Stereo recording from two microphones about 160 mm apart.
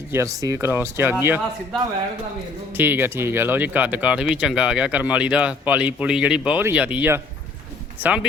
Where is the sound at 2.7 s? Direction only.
15° right (ahead or behind).